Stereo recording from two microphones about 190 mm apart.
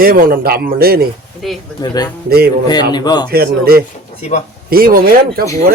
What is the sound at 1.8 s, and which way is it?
A man's voice, 20° left (ahead or behind).